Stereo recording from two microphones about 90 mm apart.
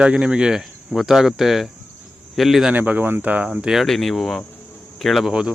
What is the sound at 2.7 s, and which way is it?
Speech, 20° right (ahead or behind).